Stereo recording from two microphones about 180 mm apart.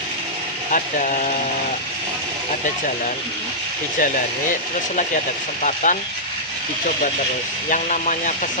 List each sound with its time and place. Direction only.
0.7 s speech: 45° left (ahead or behind)
5.6 s speech: 45° left (ahead or behind)
7.7 s speech: 45° left (ahead or behind)